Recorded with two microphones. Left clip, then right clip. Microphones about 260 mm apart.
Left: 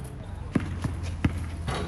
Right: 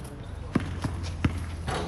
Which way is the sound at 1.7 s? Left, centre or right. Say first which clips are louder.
Right 1 dB; right.